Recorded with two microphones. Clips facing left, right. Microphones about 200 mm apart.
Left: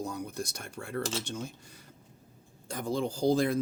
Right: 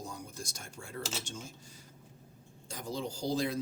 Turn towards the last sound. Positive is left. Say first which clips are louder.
# left 7 dB
turn(degrees=55)  # may be behind; listen again after turning